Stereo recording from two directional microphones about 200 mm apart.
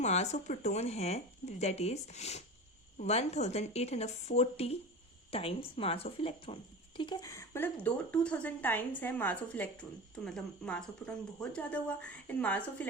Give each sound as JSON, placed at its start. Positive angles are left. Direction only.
{"t": 0.0, "sound": "a woman's voice", "side_deg": 35}